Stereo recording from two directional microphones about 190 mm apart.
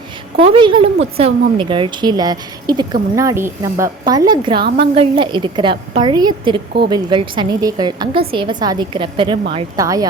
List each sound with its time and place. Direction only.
0.3 s a woman's voice: 30° right (ahead or behind)